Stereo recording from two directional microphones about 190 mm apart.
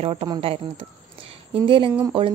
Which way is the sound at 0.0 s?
30° right (ahead or behind).